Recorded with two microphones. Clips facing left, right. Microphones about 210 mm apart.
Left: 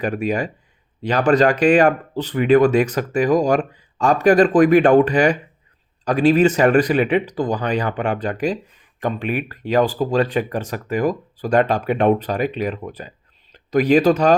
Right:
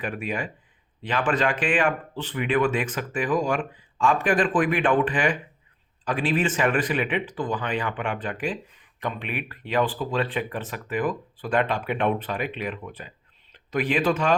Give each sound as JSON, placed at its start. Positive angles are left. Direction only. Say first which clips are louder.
{"t": 0.0, "sound": "speech", "louder": "left 8 dB", "side_deg": 40}